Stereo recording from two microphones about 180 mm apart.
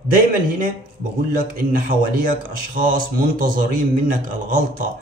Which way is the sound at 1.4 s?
50° right (ahead or behind).